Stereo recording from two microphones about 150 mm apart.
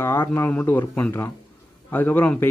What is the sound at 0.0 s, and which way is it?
A man's voice, 15° left (ahead or behind).